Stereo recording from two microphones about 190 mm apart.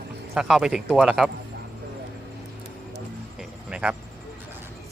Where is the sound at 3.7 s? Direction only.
5° right (ahead or behind).